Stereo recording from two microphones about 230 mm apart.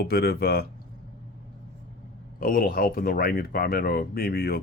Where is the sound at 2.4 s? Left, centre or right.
Left.